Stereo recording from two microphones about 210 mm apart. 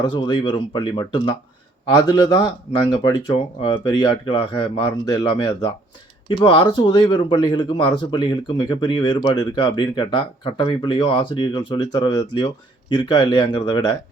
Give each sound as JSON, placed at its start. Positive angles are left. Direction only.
{"t": 0.0, "sound": "speech", "side_deg": 20}